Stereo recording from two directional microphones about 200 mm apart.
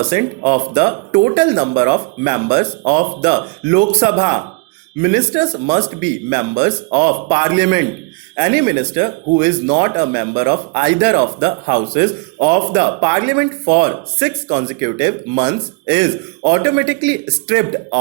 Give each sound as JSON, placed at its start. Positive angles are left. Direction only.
{"t": 0.1, "sound": "speech", "side_deg": -20}